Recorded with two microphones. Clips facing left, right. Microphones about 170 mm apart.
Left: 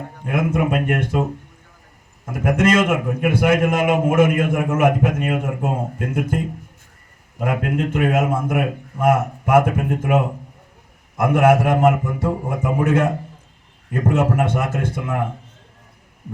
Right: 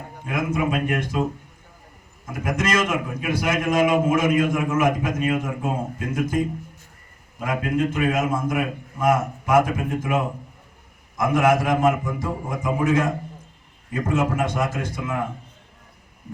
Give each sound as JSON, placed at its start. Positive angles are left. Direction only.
{"t": 0.3, "sound": "a man's voice", "side_deg": 55}
{"t": 2.2, "sound": "a man's voice", "side_deg": 55}
{"t": 11.2, "sound": "a man's voice", "side_deg": 60}